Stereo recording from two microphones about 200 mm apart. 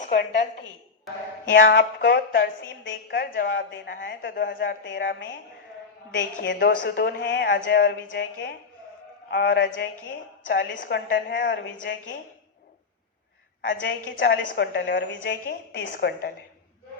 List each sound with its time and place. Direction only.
1.5 s a woman's voice: 65° left (ahead or behind)
4.5 s a woman's voice: 50° left (ahead or behind)
13.7 s a woman's voice: 65° left (ahead or behind); by 16.3 s 50° left (ahead or behind)